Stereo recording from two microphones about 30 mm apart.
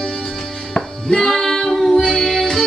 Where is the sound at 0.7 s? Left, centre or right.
Left.